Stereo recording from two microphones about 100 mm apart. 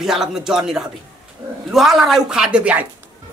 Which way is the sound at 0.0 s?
5° right (ahead or behind).